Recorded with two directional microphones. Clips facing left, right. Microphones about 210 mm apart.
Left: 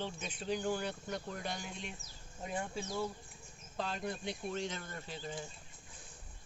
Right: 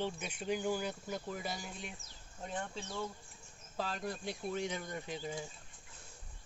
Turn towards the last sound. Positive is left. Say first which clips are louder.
# right 3 dB
turn(degrees=-15)  # may be behind; listen again after turning